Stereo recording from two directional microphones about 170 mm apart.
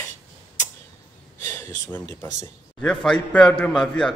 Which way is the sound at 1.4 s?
15° left (ahead or behind).